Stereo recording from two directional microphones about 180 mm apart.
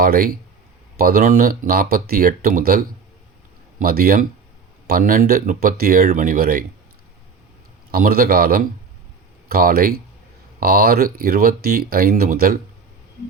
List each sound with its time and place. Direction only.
0.0 s speech: 55° right (ahead or behind)
3.8 s speech: 55° right (ahead or behind)
7.9 s speech: 55° right (ahead or behind)